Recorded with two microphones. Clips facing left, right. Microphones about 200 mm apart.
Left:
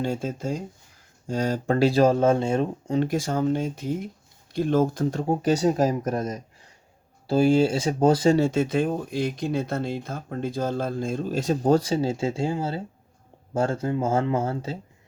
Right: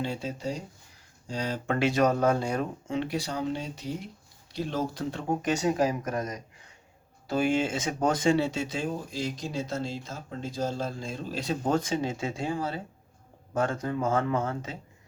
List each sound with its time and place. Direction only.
0.0 s speech: 50° left (ahead or behind); by 2.9 s 25° left (ahead or behind)
2.9 s speech: 45° left (ahead or behind)
5.3 s speech: 35° left (ahead or behind)
7.3 s speech: 30° left (ahead or behind)